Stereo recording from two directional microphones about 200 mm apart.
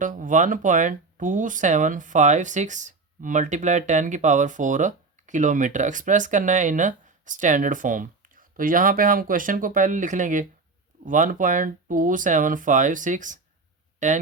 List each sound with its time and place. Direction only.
0.0 s speech: 40° right (ahead or behind)